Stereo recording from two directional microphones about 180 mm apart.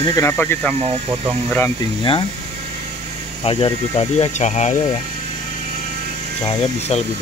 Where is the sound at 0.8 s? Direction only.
35° right (ahead or behind).